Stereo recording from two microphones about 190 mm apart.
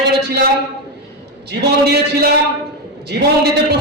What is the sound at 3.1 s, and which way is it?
Speech, 60° right (ahead or behind).